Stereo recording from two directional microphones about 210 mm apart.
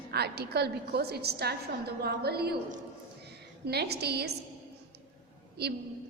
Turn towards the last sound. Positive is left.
turn(degrees=-50)  # may be behind; listen again after turning